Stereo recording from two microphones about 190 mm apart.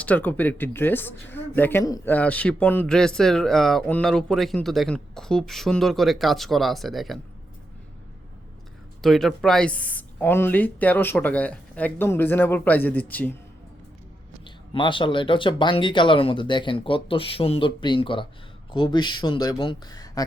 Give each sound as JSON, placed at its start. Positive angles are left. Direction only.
{"t": 0.0, "sound": "speech", "side_deg": 10}
{"t": 9.0, "sound": "speech", "side_deg": 0}
{"t": 14.4, "sound": "speech", "side_deg": 25}